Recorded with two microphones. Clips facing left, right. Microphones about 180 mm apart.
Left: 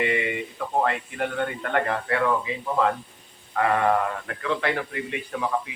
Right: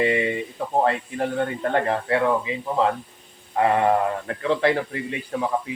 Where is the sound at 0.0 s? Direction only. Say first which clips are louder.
Right 4 dB; 35° right (ahead or behind).